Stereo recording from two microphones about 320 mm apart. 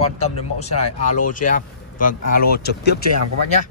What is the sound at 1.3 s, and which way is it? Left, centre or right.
Speech, left.